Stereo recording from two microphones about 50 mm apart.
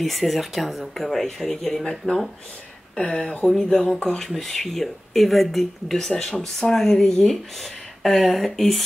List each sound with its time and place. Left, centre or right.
0.0 s speech: centre
3.0 s speech: left; by 6.1 s centre
6.1 s speech: centre